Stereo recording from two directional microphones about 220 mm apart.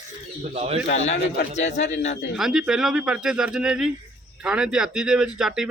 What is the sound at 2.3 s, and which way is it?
A man's voice, centre (ahead or behind).